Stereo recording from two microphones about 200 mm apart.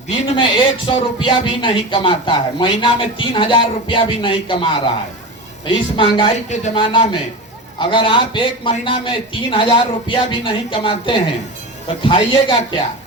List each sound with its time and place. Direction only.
0.1 s speech: 25° left (ahead or behind)